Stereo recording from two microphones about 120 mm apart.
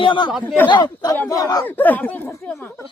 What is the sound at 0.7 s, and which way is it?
Speech, 35° left (ahead or behind).